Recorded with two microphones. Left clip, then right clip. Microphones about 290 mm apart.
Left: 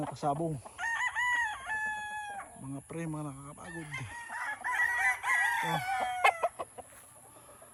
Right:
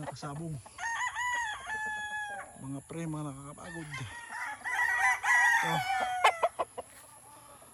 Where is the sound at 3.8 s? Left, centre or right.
Left.